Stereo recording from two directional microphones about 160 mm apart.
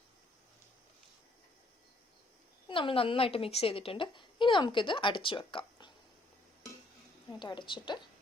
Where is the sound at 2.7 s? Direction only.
35° left (ahead or behind).